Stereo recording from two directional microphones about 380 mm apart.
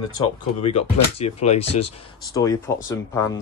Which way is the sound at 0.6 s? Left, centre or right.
Centre.